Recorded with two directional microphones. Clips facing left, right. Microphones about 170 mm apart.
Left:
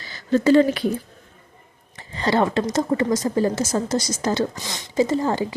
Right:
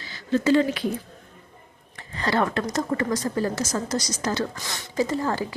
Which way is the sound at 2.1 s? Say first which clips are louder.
Left 4 dB; 25° left (ahead or behind).